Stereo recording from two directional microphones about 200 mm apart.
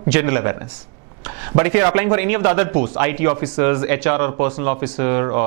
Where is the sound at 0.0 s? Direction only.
15° right (ahead or behind).